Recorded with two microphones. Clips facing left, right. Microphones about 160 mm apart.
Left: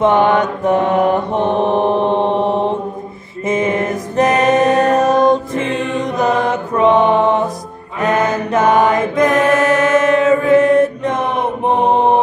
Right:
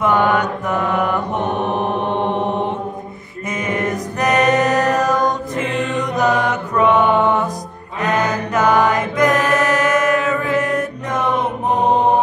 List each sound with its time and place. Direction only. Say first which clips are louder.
0.0 s mantra: left 4 dB; 25° left (ahead or behind)
3.4 s music: left 5 dB; 25° left (ahead or behind)
8.0 s chant: left 3 dB; 25° left (ahead or behind)